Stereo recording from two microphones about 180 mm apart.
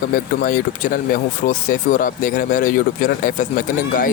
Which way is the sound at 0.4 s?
50° left (ahead or behind).